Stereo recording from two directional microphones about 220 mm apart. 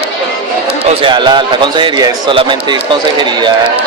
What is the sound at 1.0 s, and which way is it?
A man's voice, 20° right (ahead or behind).